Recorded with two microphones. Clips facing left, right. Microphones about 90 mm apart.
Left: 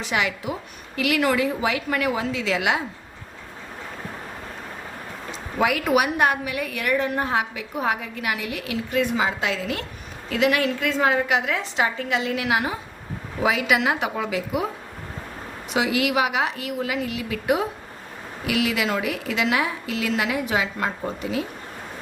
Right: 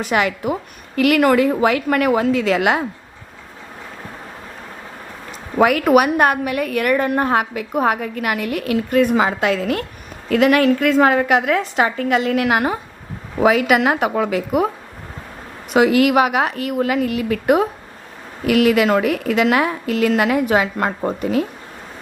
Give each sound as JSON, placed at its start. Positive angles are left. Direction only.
{"t": 0.0, "sound": "a woman's voice", "side_deg": -50}
{"t": 5.5, "sound": "a woman's voice", "side_deg": -50}
{"t": 15.7, "sound": "a woman's voice", "side_deg": -50}